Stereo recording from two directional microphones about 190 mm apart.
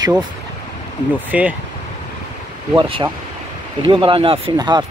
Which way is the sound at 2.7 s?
25° right (ahead or behind).